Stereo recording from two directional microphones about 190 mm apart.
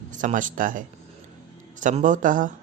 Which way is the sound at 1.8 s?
40° right (ahead or behind).